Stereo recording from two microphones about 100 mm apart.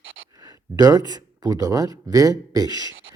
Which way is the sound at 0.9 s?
40° right (ahead or behind).